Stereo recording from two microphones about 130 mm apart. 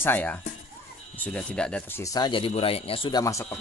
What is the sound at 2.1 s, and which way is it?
Speech, 35° left (ahead or behind).